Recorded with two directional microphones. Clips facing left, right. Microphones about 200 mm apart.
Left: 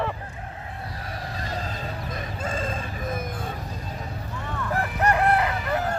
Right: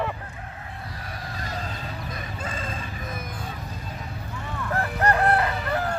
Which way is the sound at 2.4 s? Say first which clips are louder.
Left 5 dB; 45° left (ahead or behind).